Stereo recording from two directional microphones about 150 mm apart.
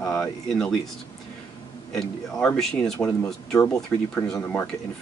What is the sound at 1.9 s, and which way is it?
Speech, 5° left (ahead or behind).